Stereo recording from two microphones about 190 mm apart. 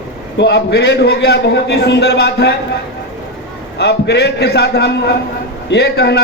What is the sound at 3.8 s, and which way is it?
A man's voice, 60° left (ahead or behind).